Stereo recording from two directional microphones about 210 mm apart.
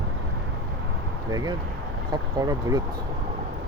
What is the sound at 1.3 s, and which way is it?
Speech, 20° right (ahead or behind).